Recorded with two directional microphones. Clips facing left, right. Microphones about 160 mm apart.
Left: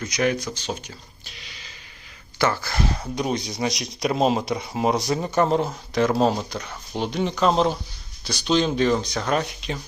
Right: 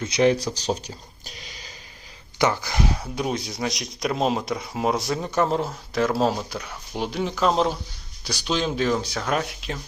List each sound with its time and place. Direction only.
0.0 s speech: 25° right (ahead or behind)
2.4 s speech: 15° right (ahead or behind)